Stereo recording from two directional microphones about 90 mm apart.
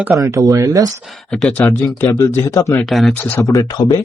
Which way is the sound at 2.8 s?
Centre (ahead or behind).